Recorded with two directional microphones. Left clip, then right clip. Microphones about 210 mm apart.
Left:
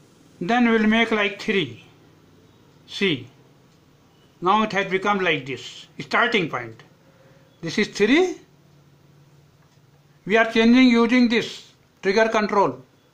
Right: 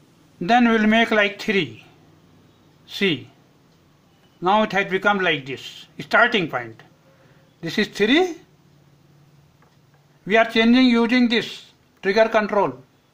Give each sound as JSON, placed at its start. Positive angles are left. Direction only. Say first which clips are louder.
{"t": 0.4, "sound": "speech", "louder": "right 3 dB", "side_deg": -20}
{"t": 2.9, "sound": "speech", "louder": "right 1 dB", "side_deg": -20}
{"t": 4.4, "sound": "speech", "louder": "right 1 dB", "side_deg": -20}
{"t": 10.2, "sound": "speech", "louder": "right 1 dB", "side_deg": -15}